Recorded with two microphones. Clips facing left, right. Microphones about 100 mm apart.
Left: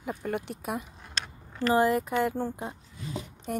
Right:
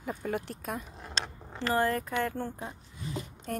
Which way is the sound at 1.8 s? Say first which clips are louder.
Left 4 dB; 15° left (ahead or behind).